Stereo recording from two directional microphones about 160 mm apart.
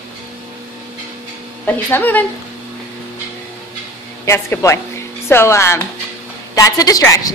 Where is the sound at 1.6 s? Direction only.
10° left (ahead or behind).